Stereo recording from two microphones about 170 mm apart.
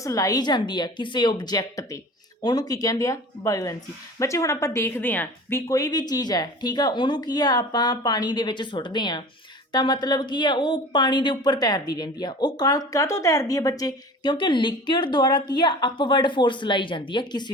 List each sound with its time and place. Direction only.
0.0 s speech: 20° left (ahead or behind)